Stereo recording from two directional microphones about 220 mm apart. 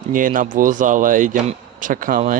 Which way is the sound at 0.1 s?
35° right (ahead or behind).